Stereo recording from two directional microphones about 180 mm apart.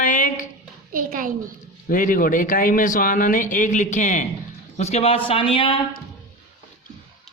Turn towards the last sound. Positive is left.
turn(degrees=30)  # may be behind; listen again after turning